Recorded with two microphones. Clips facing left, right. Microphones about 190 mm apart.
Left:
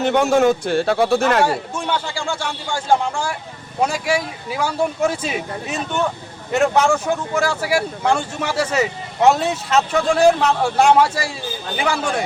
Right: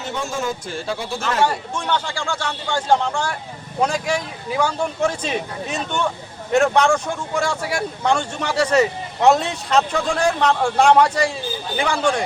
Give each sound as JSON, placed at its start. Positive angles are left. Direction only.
{"t": 0.0, "sound": "a man's voice", "side_deg": 65}
{"t": 1.5, "sound": "speech", "side_deg": 5}